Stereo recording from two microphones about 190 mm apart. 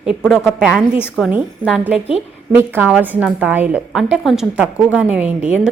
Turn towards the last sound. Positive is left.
turn(degrees=-5)  # may be behind; listen again after turning